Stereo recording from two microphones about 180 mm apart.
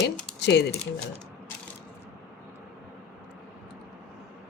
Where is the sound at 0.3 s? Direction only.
70° left (ahead or behind).